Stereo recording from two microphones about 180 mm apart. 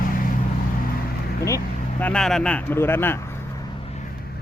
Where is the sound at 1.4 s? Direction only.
15° left (ahead or behind).